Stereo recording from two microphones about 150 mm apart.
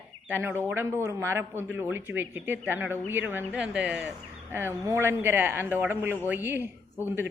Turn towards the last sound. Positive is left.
turn(degrees=-15)  # may be behind; listen again after turning